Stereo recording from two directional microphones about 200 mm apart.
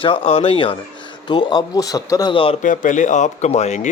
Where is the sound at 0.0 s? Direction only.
25° left (ahead or behind).